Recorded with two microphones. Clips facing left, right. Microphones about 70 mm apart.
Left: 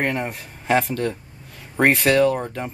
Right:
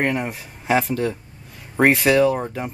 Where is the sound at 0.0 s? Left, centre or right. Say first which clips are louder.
Right 1 dB; centre.